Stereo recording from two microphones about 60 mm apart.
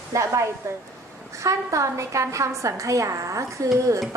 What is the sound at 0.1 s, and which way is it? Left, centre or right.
A woman's voice, right.